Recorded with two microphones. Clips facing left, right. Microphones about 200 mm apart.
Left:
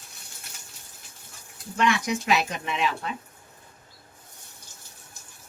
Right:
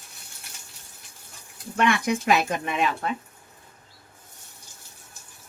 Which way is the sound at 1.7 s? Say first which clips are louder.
Right 2 dB; 55° right (ahead or behind).